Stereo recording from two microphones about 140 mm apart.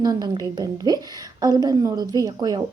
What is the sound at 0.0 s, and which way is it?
Speech, 30° right (ahead or behind).